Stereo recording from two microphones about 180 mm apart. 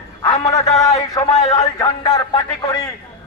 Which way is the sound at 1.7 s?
20° left (ahead or behind).